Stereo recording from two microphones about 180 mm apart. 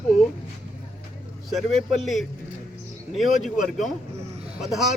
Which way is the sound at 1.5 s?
Centre (ahead or behind).